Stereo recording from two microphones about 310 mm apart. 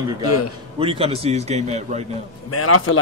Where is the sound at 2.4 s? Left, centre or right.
Left.